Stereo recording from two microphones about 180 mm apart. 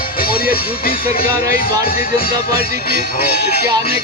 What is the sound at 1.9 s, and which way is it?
Music, 55° left (ahead or behind).